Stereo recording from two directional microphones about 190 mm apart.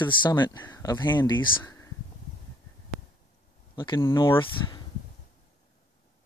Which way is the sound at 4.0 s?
15° left (ahead or behind).